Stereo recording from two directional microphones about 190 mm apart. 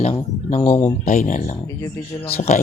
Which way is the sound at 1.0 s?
40° left (ahead or behind).